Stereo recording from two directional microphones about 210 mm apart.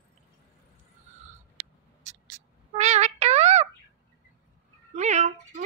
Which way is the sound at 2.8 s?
30° right (ahead or behind).